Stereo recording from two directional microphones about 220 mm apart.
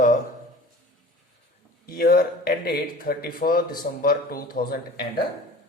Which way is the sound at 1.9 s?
40° left (ahead or behind).